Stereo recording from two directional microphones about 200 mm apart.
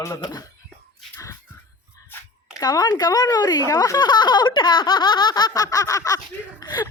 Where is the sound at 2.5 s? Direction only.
20° left (ahead or behind).